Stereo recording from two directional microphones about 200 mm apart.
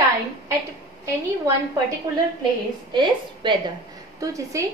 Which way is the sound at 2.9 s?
25° right (ahead or behind).